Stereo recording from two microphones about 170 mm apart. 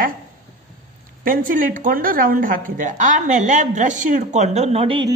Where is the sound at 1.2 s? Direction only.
55° right (ahead or behind); by 5.1 s 30° right (ahead or behind).